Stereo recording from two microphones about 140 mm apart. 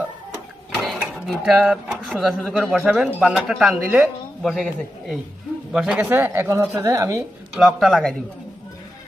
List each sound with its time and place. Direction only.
0.8 s speech: centre (ahead or behind); by 7.2 s 20° right (ahead or behind)
7.5 s speech: 5° right (ahead or behind)